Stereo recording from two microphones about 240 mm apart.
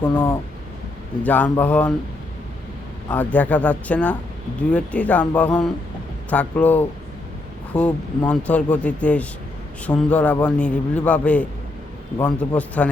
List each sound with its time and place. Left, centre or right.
0.0 s a man's voice: centre
1.2 s a man's voice: centre
3.1 s a man's voice: centre